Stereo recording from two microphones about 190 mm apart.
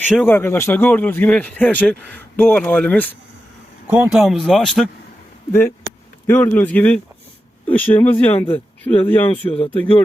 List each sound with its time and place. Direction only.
0.2 s speech: 10° left (ahead or behind)
3.8 s speech: 5° right (ahead or behind)
5.5 s speech: 10° left (ahead or behind)
9.2 s a man's voice: 30° left (ahead or behind)